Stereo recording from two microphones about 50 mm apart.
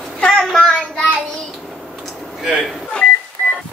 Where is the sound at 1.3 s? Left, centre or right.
Centre.